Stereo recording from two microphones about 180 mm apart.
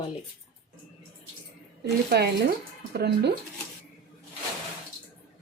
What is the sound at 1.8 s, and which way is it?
Speech, 65° right (ahead or behind).